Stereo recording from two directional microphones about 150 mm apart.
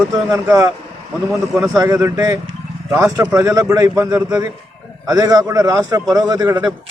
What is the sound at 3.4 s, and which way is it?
A man's voice, 20° right (ahead or behind).